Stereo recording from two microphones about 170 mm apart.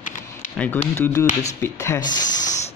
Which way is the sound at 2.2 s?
45° left (ahead or behind).